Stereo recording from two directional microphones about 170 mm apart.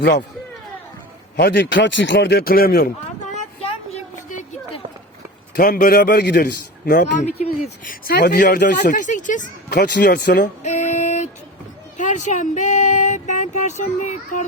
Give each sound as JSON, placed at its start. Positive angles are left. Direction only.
{"t": 1.4, "sound": "a man's voice", "side_deg": 70}
{"t": 3.3, "sound": "vehicle", "side_deg": 35}
{"t": 5.5, "sound": "a man's voice", "side_deg": 60}
{"t": 7.9, "sound": "a man's voice", "side_deg": 60}
{"t": 8.9, "sound": "speech", "side_deg": 50}
{"t": 9.6, "sound": "a man's voice", "side_deg": 80}
{"t": 10.2, "sound": "a sound", "side_deg": 50}